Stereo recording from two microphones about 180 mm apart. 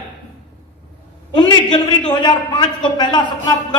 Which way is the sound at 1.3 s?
25° left (ahead or behind).